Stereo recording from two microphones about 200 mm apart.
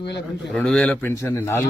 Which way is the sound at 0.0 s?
60° left (ahead or behind).